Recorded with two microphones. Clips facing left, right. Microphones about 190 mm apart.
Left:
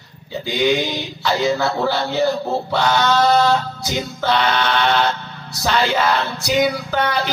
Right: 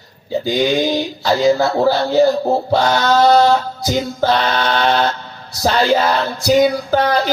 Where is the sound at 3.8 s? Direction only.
40° right (ahead or behind).